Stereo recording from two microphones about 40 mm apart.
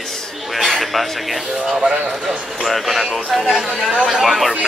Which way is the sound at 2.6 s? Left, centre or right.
Centre.